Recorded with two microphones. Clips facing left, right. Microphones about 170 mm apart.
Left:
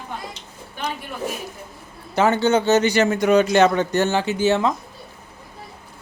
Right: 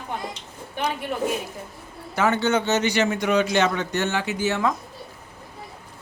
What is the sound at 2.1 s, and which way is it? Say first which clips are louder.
A man's voice: left 4 dB; 30° left (ahead or behind).